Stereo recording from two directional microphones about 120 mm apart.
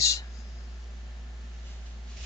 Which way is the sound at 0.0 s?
25° left (ahead or behind).